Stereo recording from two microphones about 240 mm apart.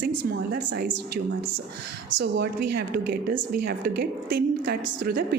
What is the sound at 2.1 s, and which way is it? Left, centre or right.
Speech, right.